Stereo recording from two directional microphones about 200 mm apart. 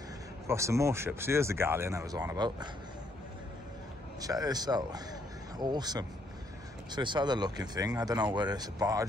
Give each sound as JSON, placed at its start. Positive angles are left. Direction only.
{"t": 0.5, "sound": "speech", "side_deg": -15}
{"t": 4.2, "sound": "speech", "side_deg": -20}